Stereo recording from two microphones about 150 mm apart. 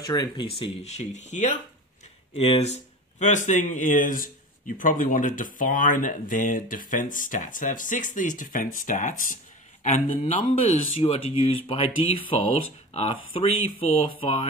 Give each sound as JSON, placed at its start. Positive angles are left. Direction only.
{"t": 0.0, "sound": "speech", "side_deg": 25}
{"t": 0.5, "sound": "speech", "side_deg": 45}
{"t": 2.3, "sound": "speech", "side_deg": 40}
{"t": 11.0, "sound": "speech", "side_deg": 40}